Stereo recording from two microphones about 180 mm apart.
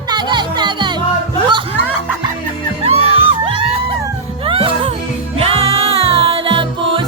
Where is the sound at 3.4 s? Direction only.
30° right (ahead or behind).